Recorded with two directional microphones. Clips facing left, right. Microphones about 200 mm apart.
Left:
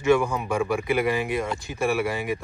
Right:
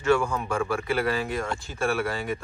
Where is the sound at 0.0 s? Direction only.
15° left (ahead or behind).